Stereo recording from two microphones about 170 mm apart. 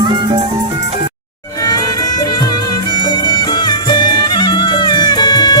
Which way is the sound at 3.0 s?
25° left (ahead or behind).